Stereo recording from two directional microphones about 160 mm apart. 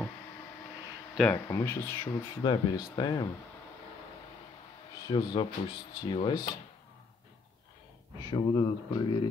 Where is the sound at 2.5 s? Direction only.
25° left (ahead or behind).